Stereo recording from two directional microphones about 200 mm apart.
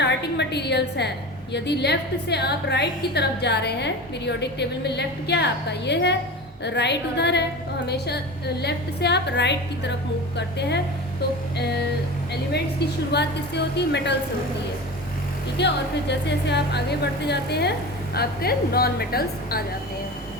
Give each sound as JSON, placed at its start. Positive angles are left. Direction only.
{"t": 0.0, "sound": "a woman's voice", "side_deg": 60}
{"t": 12.3, "sound": "a woman's voice", "side_deg": 55}
{"t": 15.5, "sound": "a woman's voice", "side_deg": 60}